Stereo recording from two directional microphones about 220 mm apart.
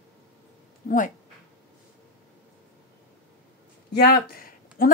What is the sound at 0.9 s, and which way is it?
Speech, 35° left (ahead or behind).